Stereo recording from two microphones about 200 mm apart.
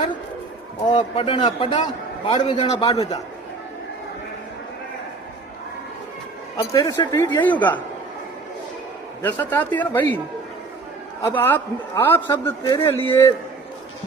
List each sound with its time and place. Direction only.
0.9 s a man's voice: 25° left (ahead or behind)
6.6 s a man's voice: 20° left (ahead or behind)
9.2 s a man's voice: 10° left (ahead or behind)
11.2 s a man's voice: 10° left (ahead or behind)